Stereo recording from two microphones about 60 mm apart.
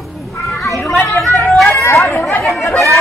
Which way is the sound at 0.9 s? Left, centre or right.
Left.